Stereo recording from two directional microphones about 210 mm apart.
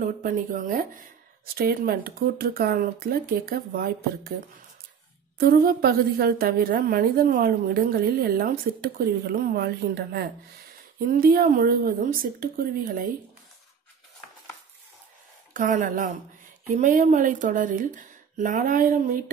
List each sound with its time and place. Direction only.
0.0 s a woman's voice: 40° right (ahead or behind)
5.4 s a woman's voice: 45° right (ahead or behind)
15.5 s a woman's voice: 40° right (ahead or behind)